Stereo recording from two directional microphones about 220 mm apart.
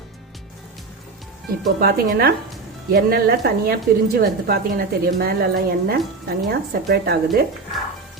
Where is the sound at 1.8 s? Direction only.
45° right (ahead or behind).